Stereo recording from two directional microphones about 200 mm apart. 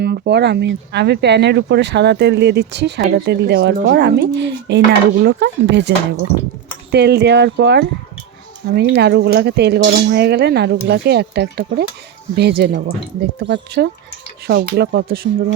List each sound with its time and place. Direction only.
0.0 s speech: 55° right (ahead or behind)
6.9 s speech: 55° right (ahead or behind)